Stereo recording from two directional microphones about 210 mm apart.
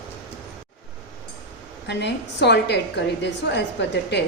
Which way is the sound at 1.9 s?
55° left (ahead or behind).